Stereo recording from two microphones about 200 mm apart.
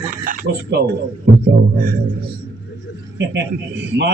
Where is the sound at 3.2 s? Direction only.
60° right (ahead or behind).